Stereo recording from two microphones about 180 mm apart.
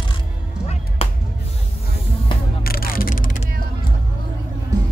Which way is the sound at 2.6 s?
55° left (ahead or behind).